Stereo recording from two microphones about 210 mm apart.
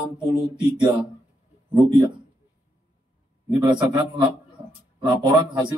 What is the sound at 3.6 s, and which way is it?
Speech, 20° right (ahead or behind).